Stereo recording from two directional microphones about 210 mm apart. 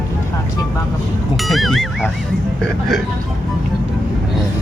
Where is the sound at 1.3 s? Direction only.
Centre (ahead or behind).